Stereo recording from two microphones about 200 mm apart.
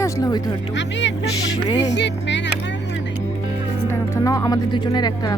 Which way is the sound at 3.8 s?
15° left (ahead or behind).